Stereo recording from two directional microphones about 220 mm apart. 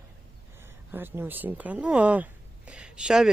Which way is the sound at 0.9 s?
10° right (ahead or behind).